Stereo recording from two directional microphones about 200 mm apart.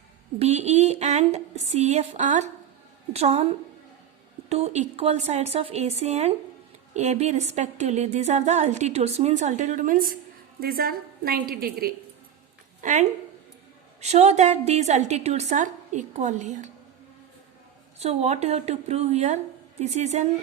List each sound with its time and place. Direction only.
0.3 s a woman's voice: 35° right (ahead or behind); by 11.9 s 50° right (ahead or behind)
12.8 s a woman's voice: 40° right (ahead or behind)
18.0 s a woman's voice: 30° right (ahead or behind)